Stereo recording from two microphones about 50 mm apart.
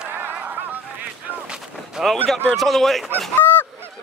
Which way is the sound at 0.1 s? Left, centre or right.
Right.